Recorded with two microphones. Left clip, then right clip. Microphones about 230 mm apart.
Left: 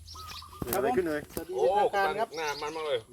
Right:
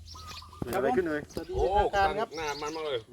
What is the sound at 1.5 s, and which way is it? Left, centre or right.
Speech, right.